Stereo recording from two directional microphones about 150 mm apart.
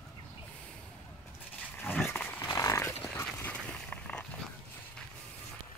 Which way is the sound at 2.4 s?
25° left (ahead or behind).